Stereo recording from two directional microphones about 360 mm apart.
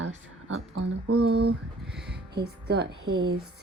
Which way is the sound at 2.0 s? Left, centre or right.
Right.